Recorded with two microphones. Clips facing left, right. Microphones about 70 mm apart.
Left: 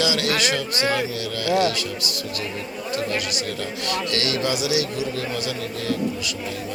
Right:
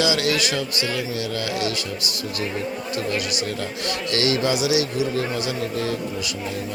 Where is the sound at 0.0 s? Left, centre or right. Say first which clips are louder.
Right 1 dB; right.